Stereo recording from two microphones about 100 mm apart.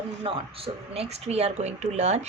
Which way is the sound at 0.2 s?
70° right (ahead or behind).